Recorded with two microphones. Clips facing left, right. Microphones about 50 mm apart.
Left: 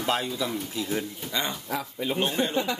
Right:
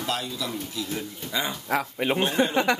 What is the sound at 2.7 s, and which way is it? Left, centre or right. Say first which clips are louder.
Speech: right 6 dB; right.